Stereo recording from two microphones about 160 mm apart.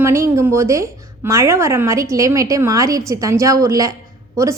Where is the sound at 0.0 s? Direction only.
20° right (ahead or behind).